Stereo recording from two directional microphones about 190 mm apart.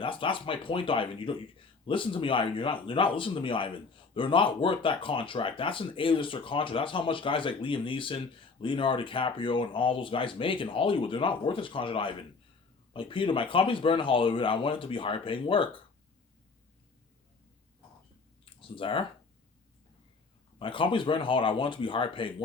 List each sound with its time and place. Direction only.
0.0 s speech: 25° left (ahead or behind)
18.8 s speech: 25° left (ahead or behind)
20.6 s speech: 25° left (ahead or behind)